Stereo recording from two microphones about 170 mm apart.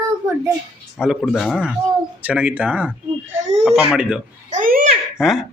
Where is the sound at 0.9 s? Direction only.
Centre (ahead or behind).